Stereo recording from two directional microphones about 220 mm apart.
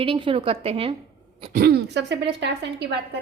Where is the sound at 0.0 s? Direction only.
25° right (ahead or behind).